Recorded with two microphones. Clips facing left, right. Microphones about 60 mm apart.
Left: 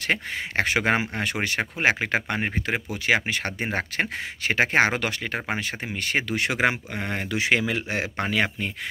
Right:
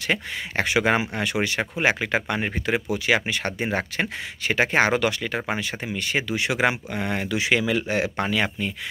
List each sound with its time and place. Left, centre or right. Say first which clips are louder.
0.1 s speech: even; left